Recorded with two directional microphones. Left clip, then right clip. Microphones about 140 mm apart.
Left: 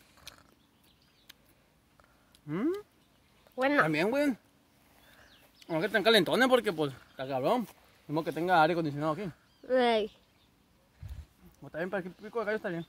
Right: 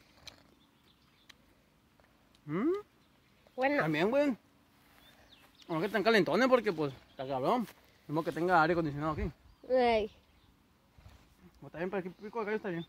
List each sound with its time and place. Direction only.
0.1 s a sound: 15° left (ahead or behind)
2.4 s speech: 25° left (ahead or behind)
5.6 s speech: 30° left (ahead or behind)
11.6 s speech: 30° left (ahead or behind)